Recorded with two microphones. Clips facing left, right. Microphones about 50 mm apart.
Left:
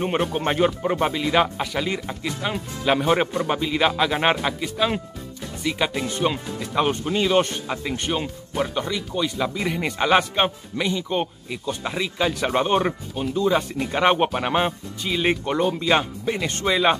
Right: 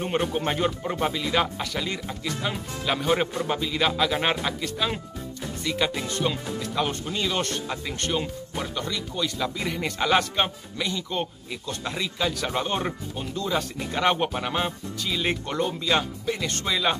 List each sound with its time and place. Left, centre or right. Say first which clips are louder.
0.4 s speech: left 5 dB; centre